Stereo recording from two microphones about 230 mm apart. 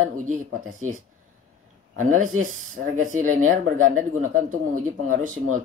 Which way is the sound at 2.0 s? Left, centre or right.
Right.